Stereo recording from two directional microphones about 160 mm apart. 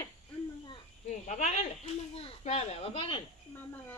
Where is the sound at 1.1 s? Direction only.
45° left (ahead or behind).